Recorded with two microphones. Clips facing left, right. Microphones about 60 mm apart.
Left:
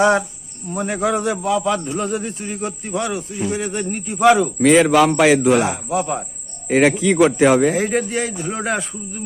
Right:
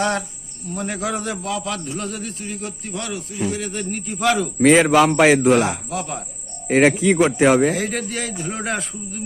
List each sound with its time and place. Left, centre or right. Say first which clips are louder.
0.0 s speech: left 7 dB; centre
1.5 s cricket: left 7 dB; centre
4.6 s a man's voice: even; centre
5.5 s speech: even; centre
5.9 s cricket: left 6 dB; centre
6.7 s a man's voice: even; centre
7.8 s speech: left 5 dB; centre